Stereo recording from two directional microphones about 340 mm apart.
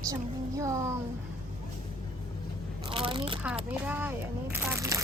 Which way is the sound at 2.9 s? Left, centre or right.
Centre.